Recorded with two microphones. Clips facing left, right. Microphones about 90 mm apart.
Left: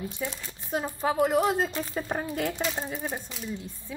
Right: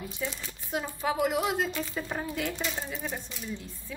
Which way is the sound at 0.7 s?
35° left (ahead or behind).